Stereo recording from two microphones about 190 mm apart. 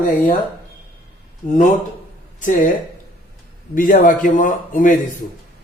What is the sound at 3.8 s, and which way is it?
A man's voice, 45° left (ahead or behind).